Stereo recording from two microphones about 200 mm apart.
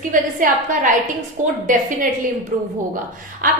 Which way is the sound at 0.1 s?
40° right (ahead or behind).